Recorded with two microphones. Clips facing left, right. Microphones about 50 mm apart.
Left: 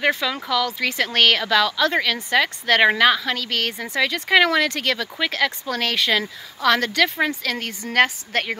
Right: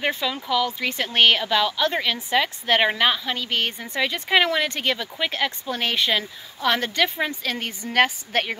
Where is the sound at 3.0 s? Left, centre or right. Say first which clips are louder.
Left 4 dB; left.